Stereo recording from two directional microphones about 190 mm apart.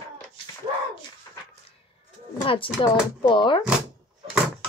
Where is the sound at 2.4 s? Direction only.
25° left (ahead or behind).